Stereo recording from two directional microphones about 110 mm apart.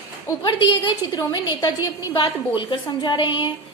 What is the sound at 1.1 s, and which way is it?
A woman's voice, 40° left (ahead or behind).